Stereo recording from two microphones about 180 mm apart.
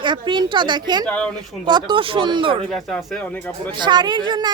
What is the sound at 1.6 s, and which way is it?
Speech, 25° right (ahead or behind).